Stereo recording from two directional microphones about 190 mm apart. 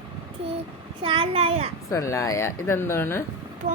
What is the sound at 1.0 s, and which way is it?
Speech, 30° right (ahead or behind).